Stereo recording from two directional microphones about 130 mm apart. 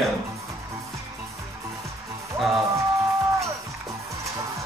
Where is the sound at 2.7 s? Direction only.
25° right (ahead or behind).